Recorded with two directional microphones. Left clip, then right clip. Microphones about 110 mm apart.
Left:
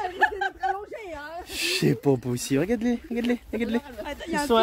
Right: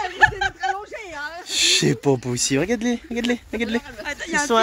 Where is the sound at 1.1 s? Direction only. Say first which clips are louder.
Right 8 dB; 15° left (ahead or behind).